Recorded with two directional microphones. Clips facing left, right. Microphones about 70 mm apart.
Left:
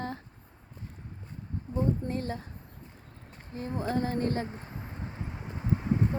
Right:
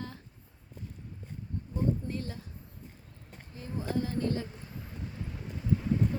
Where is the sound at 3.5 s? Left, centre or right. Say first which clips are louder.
Left 4 dB; left.